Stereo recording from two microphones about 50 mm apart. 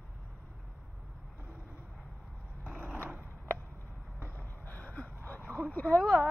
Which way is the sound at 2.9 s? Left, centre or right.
Right.